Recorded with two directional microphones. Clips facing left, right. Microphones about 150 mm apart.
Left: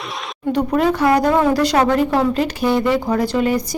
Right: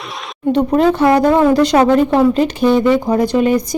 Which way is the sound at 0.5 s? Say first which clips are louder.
Right 4 dB; 25° right (ahead or behind).